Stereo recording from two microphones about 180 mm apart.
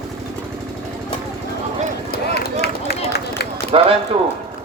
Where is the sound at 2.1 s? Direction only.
55° left (ahead or behind).